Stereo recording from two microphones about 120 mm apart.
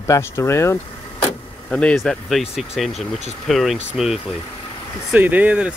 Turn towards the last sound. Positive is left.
turn(degrees=-10)  # may be behind; listen again after turning